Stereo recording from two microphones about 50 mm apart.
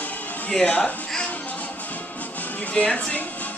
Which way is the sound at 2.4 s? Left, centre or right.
Left.